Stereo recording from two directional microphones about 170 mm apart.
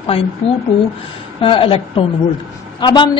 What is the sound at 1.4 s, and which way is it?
Speech, 30° left (ahead or behind).